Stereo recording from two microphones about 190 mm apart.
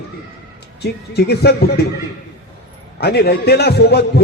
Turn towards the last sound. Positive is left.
turn(degrees=60)  # may be behind; listen again after turning